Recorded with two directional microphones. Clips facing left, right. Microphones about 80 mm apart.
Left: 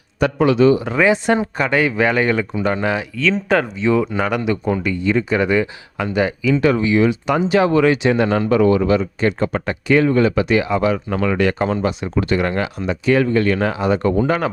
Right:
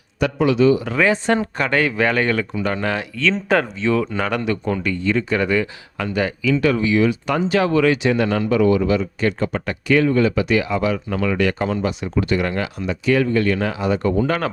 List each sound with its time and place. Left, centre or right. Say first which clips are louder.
0.2 s speech: left 2 dB; left
0.8 s speech: left 2 dB; left
2.9 s speech: left 2 dB; centre
3.8 s speech: left 3 dB; centre; by 8.4 s left
8.4 s speech: left 2 dB; left
14.3 s speech: left 2 dB; centre